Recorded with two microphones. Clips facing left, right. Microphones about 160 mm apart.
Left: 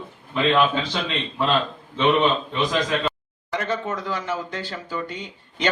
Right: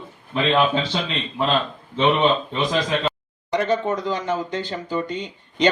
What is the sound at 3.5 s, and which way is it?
Speech, 20° right (ahead or behind).